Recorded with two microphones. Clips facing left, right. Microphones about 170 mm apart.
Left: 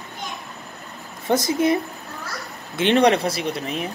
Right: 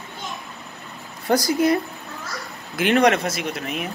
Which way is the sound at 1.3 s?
25° left (ahead or behind).